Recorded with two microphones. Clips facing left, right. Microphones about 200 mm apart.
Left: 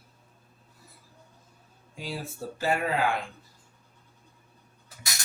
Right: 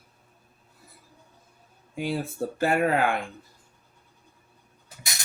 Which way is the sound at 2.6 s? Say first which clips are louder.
Right 4 dB; 55° right (ahead or behind).